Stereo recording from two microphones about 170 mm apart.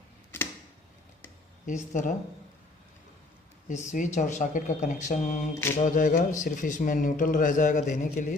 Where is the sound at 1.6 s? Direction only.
45° left (ahead or behind).